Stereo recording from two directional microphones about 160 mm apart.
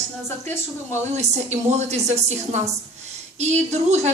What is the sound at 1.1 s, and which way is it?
A woman's voice, 45° right (ahead or behind).